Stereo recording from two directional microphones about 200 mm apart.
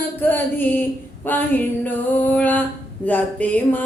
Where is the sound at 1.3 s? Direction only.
10° left (ahead or behind).